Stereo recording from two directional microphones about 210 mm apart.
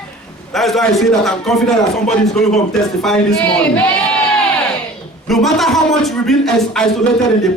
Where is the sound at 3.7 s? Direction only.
5° left (ahead or behind).